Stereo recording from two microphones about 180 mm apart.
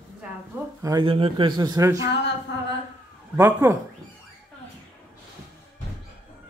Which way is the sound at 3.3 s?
15° right (ahead or behind).